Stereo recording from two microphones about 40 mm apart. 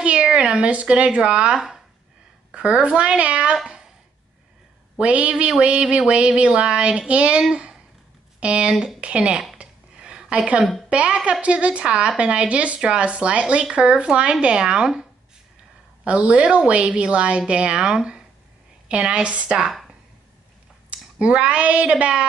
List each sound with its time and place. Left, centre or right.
0.0 s a sound: right
0.7 s a woman's voice: right
3.6 s a sound: centre
4.9 s speech: right
5.5 s a woman's voice: right
9.6 s a sound: right
10.9 s a woman's voice: right; by 15.0 s centre
16.0 s a woman's voice: right
20.9 s speech: right